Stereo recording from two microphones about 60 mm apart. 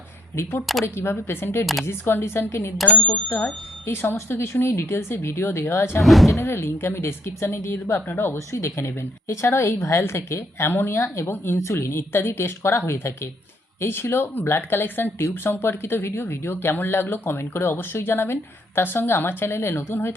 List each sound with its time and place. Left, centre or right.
0.9 s speech: left
2.8 s speech: left
3.8 s speech: left
6.0 s speech: centre
6.5 s speech: left
8.5 s speech: left